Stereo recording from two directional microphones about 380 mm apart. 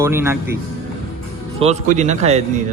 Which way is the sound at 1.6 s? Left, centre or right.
Centre.